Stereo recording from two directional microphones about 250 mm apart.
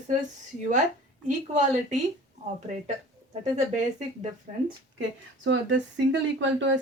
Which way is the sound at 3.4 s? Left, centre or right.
Right.